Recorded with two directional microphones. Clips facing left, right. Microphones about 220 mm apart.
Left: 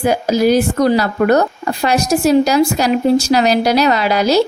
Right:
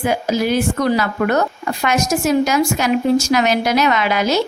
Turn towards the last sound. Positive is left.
turn(degrees=35)  # may be behind; listen again after turning